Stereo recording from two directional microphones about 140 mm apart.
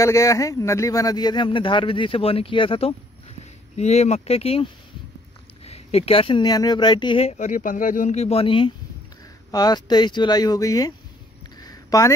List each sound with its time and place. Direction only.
0.0 s a man's voice: 20° left (ahead or behind); by 2.9 s 40° left (ahead or behind)
3.7 s speech: 50° left (ahead or behind)
5.7 s a man's voice: 45° left (ahead or behind)
7.3 s speech: 65° left (ahead or behind); by 10.9 s 25° left (ahead or behind)
11.6 s a sound: 25° left (ahead or behind)